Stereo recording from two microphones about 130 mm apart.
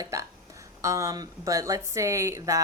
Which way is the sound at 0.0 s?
25° right (ahead or behind).